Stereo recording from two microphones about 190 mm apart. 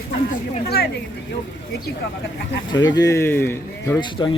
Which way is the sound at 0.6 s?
55° left (ahead or behind).